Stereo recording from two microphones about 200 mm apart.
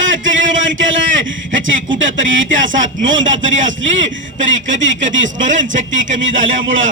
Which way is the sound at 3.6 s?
70° right (ahead or behind).